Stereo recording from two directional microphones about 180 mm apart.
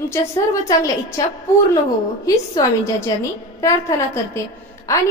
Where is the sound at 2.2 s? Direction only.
20° left (ahead or behind).